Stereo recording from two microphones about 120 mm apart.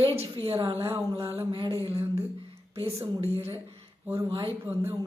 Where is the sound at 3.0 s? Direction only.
55° right (ahead or behind).